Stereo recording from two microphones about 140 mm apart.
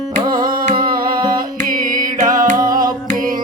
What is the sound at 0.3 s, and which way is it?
Music, 90° right.